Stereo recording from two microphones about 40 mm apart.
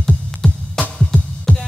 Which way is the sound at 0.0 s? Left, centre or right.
Centre.